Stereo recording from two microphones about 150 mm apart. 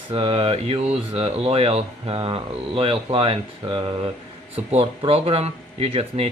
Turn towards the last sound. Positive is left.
turn(degrees=-40)  # may be behind; listen again after turning